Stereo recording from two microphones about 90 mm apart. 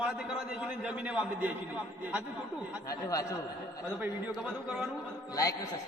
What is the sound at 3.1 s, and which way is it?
Speech, 40° left (ahead or behind).